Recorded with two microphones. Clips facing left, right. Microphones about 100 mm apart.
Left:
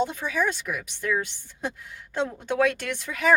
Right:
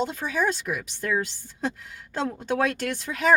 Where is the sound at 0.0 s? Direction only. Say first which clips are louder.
Even; 35° right (ahead or behind).